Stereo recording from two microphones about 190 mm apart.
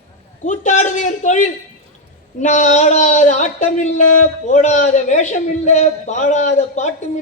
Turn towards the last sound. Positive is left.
turn(degrees=40)  # may be behind; listen again after turning